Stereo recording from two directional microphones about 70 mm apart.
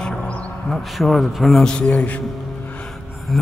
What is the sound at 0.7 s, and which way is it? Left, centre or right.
Speech, centre.